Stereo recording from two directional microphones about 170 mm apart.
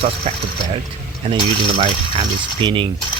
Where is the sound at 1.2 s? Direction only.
30° right (ahead or behind).